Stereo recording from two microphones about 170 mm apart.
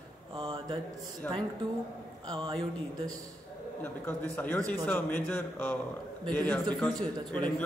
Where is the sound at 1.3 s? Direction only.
10° left (ahead or behind).